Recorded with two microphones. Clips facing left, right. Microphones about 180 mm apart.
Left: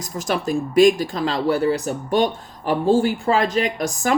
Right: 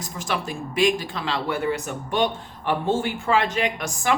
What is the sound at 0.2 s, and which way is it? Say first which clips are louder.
Speech: left 7 dB; 40° left (ahead or behind).